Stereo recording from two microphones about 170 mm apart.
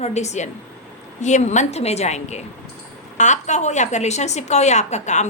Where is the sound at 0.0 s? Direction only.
40° left (ahead or behind).